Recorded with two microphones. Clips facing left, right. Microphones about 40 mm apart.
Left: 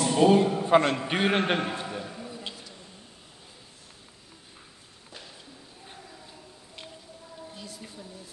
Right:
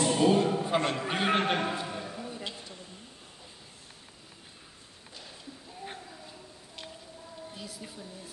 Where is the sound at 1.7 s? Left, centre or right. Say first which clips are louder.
Even; left.